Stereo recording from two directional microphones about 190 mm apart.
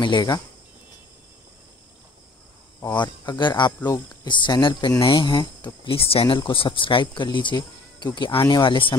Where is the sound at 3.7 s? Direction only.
10° left (ahead or behind).